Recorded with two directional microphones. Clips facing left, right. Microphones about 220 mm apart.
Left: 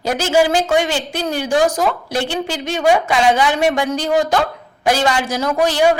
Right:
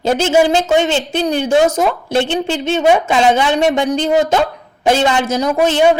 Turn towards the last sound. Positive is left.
turn(degrees=-20)  # may be behind; listen again after turning